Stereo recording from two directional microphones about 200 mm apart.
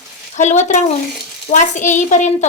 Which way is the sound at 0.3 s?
35° left (ahead or behind).